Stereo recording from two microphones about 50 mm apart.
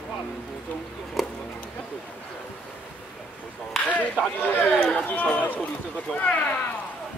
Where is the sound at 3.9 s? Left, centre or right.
Left.